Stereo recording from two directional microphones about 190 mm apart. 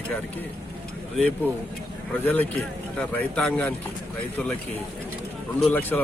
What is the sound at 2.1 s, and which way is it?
Speech, 10° left (ahead or behind).